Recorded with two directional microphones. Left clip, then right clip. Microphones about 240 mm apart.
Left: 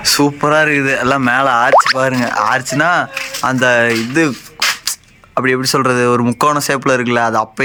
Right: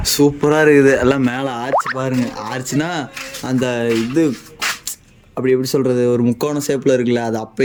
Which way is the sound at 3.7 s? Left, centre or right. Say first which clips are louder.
Left 5 dB; left.